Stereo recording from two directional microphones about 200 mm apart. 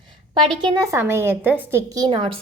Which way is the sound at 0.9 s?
10° right (ahead or behind).